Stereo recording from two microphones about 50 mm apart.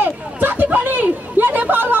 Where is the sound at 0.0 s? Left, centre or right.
Right.